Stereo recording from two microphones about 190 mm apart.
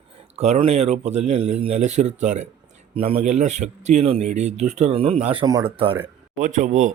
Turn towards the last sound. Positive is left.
turn(degrees=-40)  # may be behind; listen again after turning